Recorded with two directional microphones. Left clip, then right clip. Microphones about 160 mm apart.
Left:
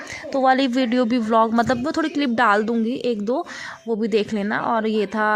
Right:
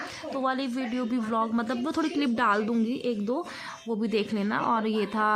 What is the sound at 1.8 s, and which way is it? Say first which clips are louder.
A woman's voice: left 6 dB; 30° left (ahead or behind).